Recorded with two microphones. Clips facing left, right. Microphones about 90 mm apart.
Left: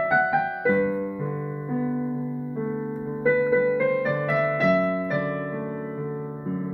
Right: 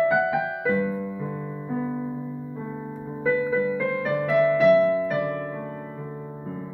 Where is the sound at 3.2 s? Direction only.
5° left (ahead or behind).